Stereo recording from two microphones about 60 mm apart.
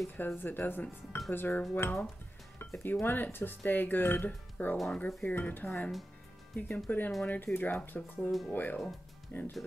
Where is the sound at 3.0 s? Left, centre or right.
Left.